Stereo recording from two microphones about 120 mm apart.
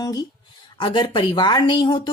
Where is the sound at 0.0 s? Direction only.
30° left (ahead or behind).